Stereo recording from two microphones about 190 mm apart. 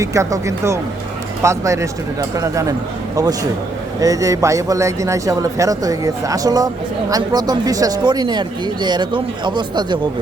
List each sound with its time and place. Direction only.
0.0 s a man's voice: 15° right (ahead or behind)
4.0 s a man's voice: 15° right (ahead or behind)